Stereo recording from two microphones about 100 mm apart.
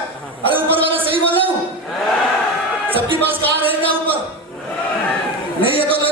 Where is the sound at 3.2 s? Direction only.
20° right (ahead or behind).